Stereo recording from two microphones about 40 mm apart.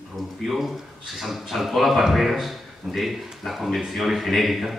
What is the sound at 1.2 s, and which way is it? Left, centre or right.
A man's voice, centre.